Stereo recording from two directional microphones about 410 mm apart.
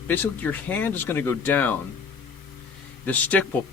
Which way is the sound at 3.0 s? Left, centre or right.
Centre.